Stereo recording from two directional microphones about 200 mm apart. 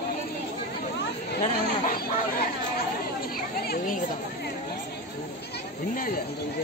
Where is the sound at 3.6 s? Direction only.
45° left (ahead or behind).